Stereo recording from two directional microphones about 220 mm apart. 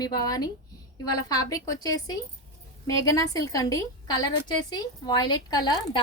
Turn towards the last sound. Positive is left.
turn(degrees=20)  # may be behind; listen again after turning